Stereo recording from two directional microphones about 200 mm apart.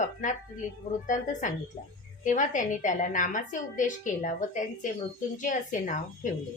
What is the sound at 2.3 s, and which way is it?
A woman's voice, 40° left (ahead or behind).